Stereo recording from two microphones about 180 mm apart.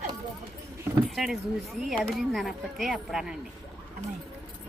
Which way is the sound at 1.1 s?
Centre (ahead or behind).